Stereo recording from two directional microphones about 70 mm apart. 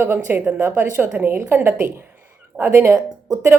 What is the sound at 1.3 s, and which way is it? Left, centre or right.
A woman's voice, right.